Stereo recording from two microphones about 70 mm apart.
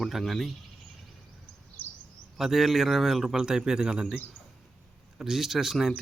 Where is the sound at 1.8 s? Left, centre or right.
Left.